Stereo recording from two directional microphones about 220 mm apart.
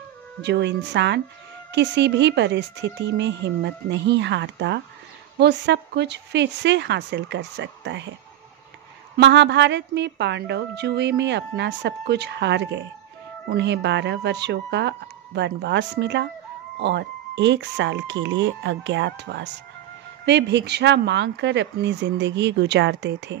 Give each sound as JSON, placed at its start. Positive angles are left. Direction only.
{"t": 0.4, "sound": "a woman's voice", "side_deg": -50}
{"t": 9.1, "sound": "a woman's voice", "side_deg": -50}